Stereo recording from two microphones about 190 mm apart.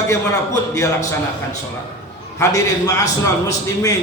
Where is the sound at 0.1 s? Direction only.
15° left (ahead or behind).